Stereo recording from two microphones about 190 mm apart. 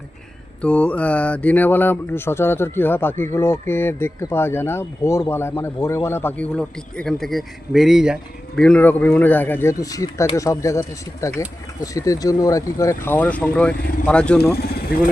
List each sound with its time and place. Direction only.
0.6 s a man's voice: 5° left (ahead or behind)
14.6 s speech: 55° left (ahead or behind)